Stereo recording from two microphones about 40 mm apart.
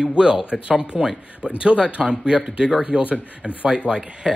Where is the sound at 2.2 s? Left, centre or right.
Centre.